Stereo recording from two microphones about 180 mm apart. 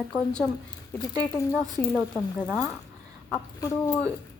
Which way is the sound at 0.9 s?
20° left (ahead or behind).